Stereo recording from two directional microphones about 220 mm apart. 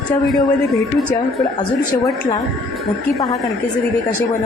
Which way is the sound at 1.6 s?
20° left (ahead or behind).